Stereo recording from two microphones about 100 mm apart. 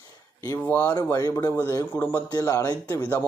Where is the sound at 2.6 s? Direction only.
25° left (ahead or behind).